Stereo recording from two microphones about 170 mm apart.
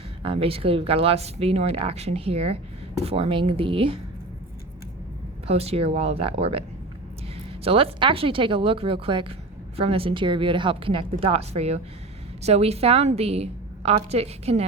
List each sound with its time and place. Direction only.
0.2 s speech: 35° right (ahead or behind)
5.5 s speech: 35° right (ahead or behind)